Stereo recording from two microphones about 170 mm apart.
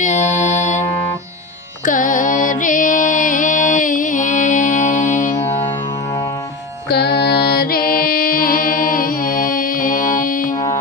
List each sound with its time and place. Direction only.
0.0 s music: 45° left (ahead or behind)
1.9 s music: 50° left (ahead or behind)
6.9 s music: 75° left (ahead or behind); by 10.5 s 50° left (ahead or behind)